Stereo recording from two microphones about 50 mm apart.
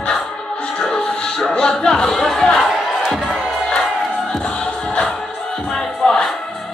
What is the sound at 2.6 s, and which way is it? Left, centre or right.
Music, centre.